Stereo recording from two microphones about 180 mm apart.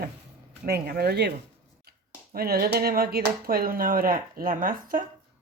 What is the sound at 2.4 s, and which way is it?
Speech, 60° right (ahead or behind).